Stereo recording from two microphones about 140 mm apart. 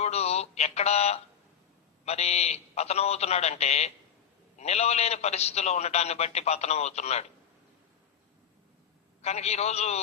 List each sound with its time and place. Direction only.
0.0 s a sound: 50° left (ahead or behind)
2.0 s a man's voice: 50° left (ahead or behind)
9.2 s a man's voice: 50° left (ahead or behind)